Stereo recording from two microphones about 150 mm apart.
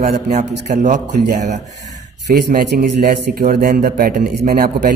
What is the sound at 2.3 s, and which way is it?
A man's voice, 75° right (ahead or behind).